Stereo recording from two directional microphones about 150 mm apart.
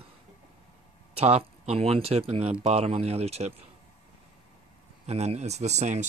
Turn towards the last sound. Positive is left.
turn(degrees=-50)  # may be behind; listen again after turning